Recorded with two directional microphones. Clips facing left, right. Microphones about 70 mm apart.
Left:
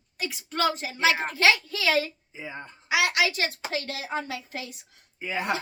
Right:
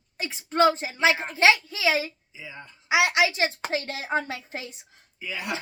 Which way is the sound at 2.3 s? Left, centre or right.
Left.